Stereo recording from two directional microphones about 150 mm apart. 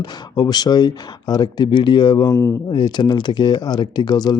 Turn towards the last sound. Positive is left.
turn(degrees=25)  # may be behind; listen again after turning